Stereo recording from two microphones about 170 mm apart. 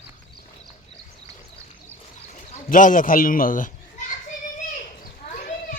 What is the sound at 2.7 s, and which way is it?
A man's voice, 50° left (ahead or behind).